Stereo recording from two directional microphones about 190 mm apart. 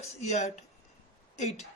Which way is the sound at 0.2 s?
35° left (ahead or behind).